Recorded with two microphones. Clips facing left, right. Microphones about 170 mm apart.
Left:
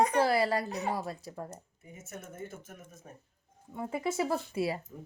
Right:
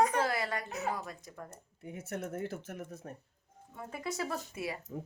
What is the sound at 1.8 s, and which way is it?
Speech, 70° right (ahead or behind).